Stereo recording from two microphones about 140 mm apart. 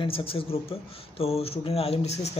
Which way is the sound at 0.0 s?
40° left (ahead or behind).